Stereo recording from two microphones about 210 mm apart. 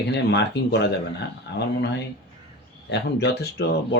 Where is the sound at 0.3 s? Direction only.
55° left (ahead or behind).